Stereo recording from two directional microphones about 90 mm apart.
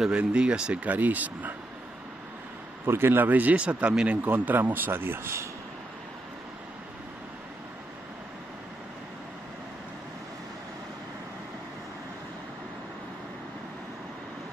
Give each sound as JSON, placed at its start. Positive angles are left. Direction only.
{"t": 0.0, "sound": "speech", "side_deg": -10}
{"t": 2.8, "sound": "speech", "side_deg": -25}